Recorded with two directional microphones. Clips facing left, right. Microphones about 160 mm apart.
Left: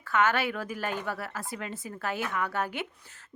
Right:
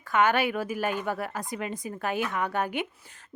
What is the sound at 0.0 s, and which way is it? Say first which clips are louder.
A woman's voice: right 3 dB; 15° right (ahead or behind).